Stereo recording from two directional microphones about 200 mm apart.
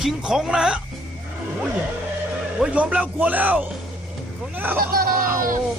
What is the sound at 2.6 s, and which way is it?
Speech, 5° right (ahead or behind).